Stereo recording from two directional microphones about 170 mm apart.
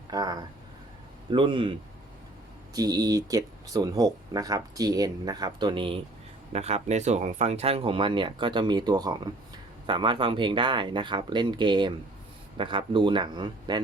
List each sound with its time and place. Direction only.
0.1 s speech: 25° right (ahead or behind)
2.7 s speech: 20° right (ahead or behind)